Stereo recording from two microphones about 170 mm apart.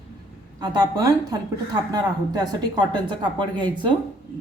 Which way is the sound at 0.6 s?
25° right (ahead or behind).